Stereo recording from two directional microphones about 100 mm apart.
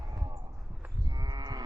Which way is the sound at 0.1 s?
35° right (ahead or behind).